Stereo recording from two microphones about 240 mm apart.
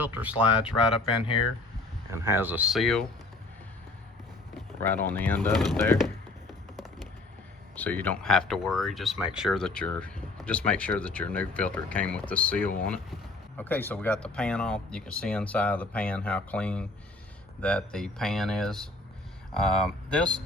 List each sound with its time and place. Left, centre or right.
0.0 s speech: centre
1.0 s speech: left
2.2 s speech: centre
4.8 s speech: centre
7.8 s speech: centre